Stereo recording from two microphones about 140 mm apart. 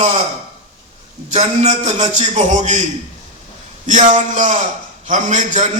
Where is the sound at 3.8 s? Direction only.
65° right (ahead or behind).